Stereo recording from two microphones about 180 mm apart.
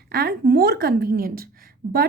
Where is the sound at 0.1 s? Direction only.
60° right (ahead or behind).